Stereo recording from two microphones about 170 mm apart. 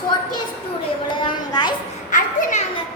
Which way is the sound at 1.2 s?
25° left (ahead or behind).